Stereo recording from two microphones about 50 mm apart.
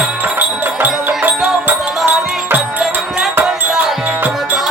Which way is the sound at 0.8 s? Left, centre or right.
Right.